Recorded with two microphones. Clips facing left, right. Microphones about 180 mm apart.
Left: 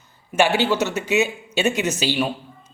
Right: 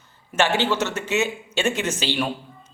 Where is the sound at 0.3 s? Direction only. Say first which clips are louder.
Left 3 dB; 10° left (ahead or behind).